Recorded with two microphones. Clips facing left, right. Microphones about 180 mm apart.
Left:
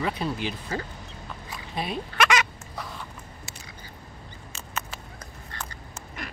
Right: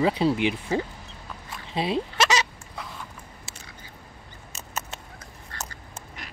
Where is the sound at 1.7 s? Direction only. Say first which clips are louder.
Right 3 dB; 25° right (ahead or behind).